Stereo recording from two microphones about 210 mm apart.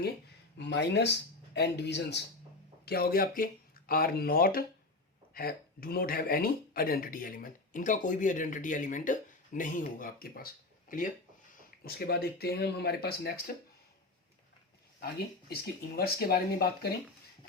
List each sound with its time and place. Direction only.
0.6 s speech: 55° left (ahead or behind)
15.0 s speech: 45° left (ahead or behind)